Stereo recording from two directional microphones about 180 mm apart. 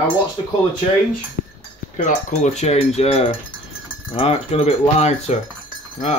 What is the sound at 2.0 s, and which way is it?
Cutlery, 45° left (ahead or behind).